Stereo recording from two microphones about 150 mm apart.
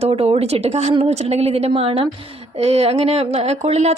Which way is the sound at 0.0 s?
40° right (ahead or behind).